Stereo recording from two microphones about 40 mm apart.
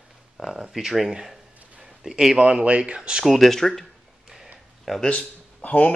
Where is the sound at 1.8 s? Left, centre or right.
Centre.